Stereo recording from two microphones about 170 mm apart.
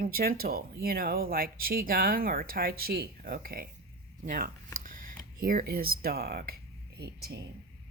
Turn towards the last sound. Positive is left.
turn(degrees=-65)  # may be behind; listen again after turning